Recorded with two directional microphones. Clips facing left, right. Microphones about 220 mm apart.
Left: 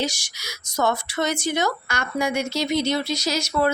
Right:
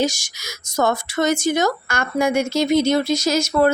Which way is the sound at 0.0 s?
45° right (ahead or behind).